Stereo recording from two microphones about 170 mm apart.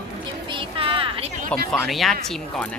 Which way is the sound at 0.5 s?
30° right (ahead or behind).